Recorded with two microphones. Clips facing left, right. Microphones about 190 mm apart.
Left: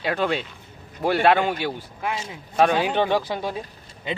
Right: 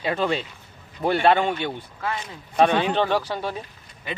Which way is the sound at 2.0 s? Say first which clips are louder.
Left 1 dB; 20° left (ahead or behind).